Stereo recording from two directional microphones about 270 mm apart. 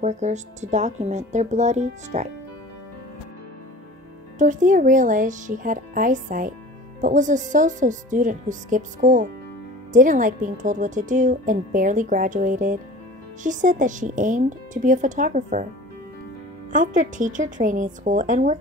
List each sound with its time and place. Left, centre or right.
0.0 s a woman's voice: right
4.4 s a woman's voice: right
16.7 s a woman's voice: right